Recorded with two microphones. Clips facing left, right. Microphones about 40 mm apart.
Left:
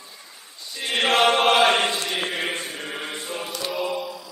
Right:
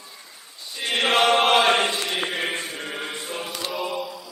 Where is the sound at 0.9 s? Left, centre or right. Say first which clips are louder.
Even; centre.